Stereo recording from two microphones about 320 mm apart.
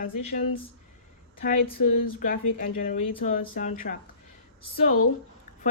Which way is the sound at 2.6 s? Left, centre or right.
Left.